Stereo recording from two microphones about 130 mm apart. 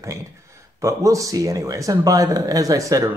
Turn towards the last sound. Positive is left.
turn(degrees=-25)  # may be behind; listen again after turning